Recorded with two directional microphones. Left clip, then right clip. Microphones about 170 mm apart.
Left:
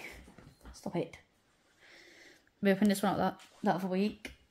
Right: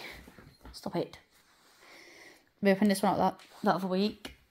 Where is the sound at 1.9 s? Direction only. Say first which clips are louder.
Right 3 dB; 10° right (ahead or behind).